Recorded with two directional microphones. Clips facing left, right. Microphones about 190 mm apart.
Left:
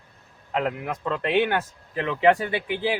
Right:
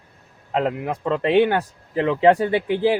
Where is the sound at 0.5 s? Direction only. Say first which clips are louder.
Right 4 dB; 30° right (ahead or behind).